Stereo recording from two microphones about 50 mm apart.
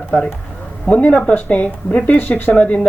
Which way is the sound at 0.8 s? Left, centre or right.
Left.